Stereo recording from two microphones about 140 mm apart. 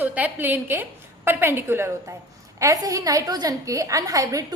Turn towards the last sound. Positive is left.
turn(degrees=-25)  # may be behind; listen again after turning